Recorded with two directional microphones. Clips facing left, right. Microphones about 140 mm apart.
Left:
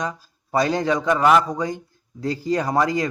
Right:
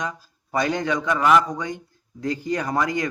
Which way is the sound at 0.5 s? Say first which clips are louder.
Left 3 dB; 35° left (ahead or behind).